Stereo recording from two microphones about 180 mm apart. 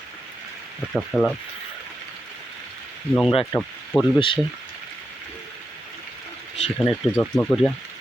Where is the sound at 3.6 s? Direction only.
5° left (ahead or behind).